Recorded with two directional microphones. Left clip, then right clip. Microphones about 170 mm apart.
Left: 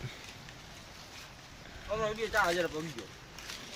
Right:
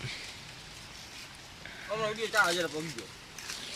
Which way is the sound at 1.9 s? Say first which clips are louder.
Right 1 dB; 15° right (ahead or behind).